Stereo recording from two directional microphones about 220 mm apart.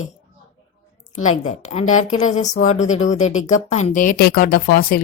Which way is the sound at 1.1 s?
35° left (ahead or behind).